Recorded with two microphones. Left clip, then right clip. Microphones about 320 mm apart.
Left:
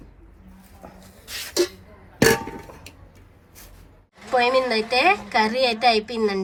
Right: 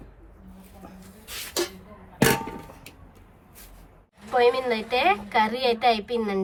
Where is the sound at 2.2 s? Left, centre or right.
Centre.